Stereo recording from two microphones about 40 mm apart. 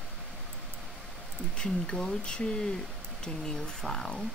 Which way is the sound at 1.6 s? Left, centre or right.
Centre.